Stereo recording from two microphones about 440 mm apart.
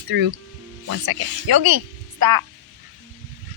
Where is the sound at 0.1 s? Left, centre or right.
Right.